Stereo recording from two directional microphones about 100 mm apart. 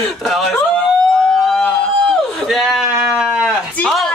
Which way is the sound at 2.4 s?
Centre (ahead or behind).